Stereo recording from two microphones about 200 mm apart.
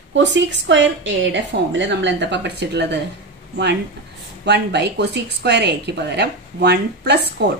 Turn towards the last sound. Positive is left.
turn(degrees=-55)  # may be behind; listen again after turning